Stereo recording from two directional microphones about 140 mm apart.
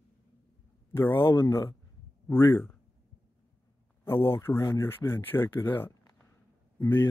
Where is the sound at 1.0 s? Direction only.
15° left (ahead or behind).